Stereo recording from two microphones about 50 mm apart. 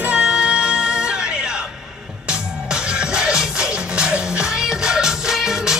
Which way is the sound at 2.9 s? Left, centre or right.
Centre.